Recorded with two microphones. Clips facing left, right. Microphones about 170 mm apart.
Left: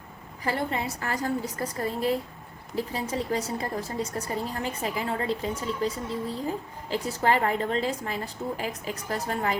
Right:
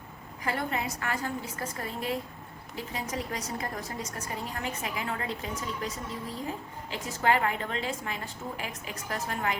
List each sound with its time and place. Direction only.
0.4 s a woman's voice: 30° left (ahead or behind)